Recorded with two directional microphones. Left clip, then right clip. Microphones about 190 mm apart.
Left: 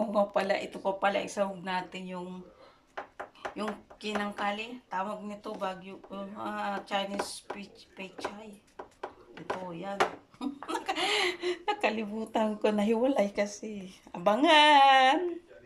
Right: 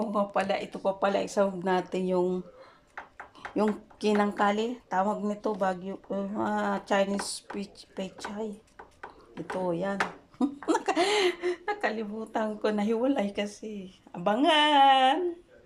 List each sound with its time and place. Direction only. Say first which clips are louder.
0.0 s speech: even; 5° right (ahead or behind)
1.6 s speech: right 7 dB; 35° right (ahead or behind)
3.5 s speech: right 8 dB; 40° right (ahead or behind)
9.8 s a sound: even; 40° right (ahead or behind)
11.0 s speech: right 1 dB; 15° right (ahead or behind)
11.3 s a woman's voice: even; centre (ahead or behind)